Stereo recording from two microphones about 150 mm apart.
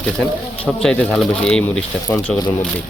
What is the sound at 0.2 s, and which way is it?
Speech, 10° left (ahead or behind).